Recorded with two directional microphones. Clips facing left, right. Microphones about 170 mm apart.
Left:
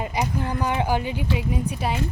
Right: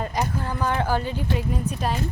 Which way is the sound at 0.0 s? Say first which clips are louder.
Left 1 dB; 10° left (ahead or behind).